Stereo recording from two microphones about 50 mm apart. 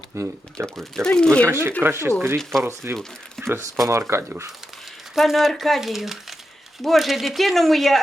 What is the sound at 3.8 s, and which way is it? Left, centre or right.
Speech, right.